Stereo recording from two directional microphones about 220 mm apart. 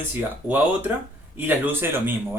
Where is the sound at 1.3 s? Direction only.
10° right (ahead or behind).